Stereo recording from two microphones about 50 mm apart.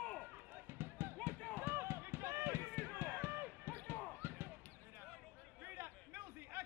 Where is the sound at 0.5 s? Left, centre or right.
Right.